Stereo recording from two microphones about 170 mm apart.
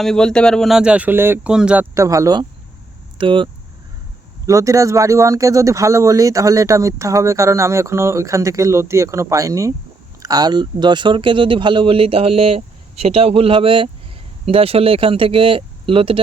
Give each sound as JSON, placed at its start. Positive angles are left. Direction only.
{"t": 0.0, "sound": "speech", "side_deg": 5}
{"t": 4.4, "sound": "speech", "side_deg": -20}